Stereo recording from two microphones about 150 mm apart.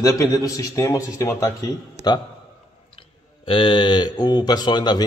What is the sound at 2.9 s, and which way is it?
Speech, 35° left (ahead or behind).